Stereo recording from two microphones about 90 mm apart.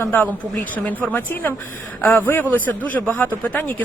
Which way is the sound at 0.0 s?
20° left (ahead or behind).